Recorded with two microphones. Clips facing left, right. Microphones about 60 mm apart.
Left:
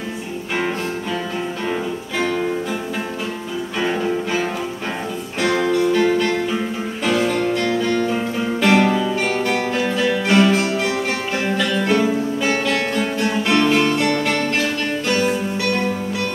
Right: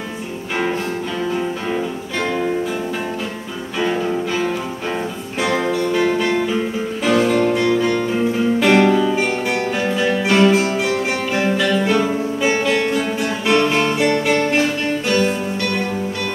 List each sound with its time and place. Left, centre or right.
3.8 s music: centre
5.7 s music: centre
15.0 s music: centre